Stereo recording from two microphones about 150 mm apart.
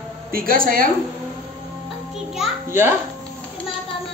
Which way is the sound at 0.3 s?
70° right (ahead or behind).